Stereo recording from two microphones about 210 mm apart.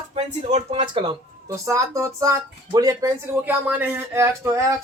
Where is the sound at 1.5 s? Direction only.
15° right (ahead or behind).